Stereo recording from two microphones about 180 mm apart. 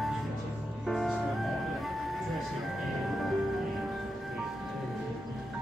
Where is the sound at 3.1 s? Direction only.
Centre (ahead or behind).